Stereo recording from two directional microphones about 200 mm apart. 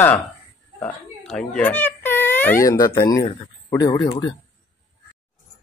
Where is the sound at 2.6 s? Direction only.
15° left (ahead or behind).